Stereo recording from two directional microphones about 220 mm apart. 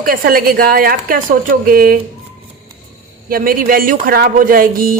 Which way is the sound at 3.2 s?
40° right (ahead or behind).